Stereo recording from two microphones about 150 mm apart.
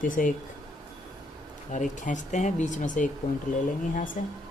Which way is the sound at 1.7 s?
55° left (ahead or behind).